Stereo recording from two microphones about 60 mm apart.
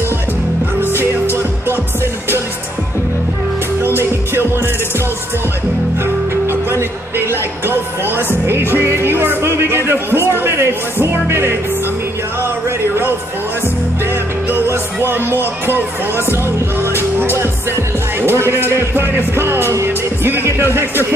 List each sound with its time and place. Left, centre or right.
0.7 s music: right
3.8 s music: right
6.4 s music: right
12.6 s a sound: right
14.7 s music: right
15.6 s speech: right